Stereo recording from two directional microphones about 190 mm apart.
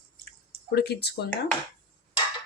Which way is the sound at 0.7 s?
60° left (ahead or behind).